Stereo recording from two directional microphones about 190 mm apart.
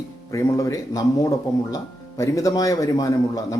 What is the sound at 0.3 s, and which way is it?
Speech, 15° left (ahead or behind).